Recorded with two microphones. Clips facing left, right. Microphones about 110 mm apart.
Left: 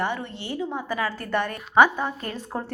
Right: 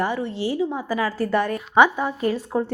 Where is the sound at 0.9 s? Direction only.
35° right (ahead or behind).